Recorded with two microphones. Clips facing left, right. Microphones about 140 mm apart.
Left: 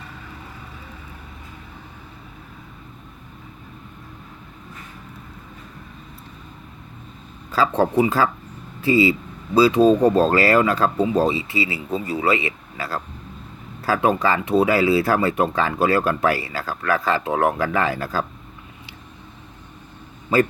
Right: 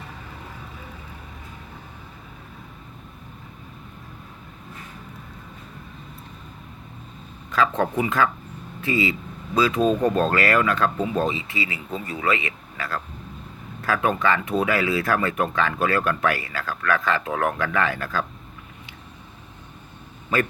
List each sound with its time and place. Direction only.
7.8 s speech: 30° left (ahead or behind)
20.3 s speech: 30° left (ahead or behind)